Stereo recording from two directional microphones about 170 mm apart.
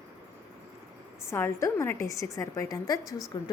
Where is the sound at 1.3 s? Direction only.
15° left (ahead or behind).